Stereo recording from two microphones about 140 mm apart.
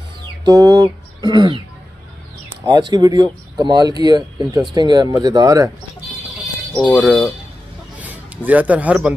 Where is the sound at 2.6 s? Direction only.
30° right (ahead or behind).